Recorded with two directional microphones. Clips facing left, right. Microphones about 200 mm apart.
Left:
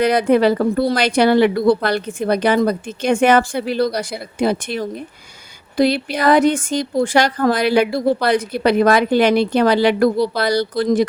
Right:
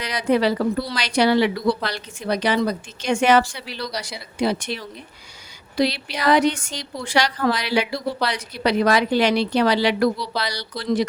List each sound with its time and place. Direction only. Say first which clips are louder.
0.0 s a woman's voice: left 6 dB; 55° left (ahead or behind)